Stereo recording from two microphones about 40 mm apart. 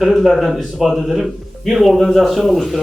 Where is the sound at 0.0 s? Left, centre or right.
Centre.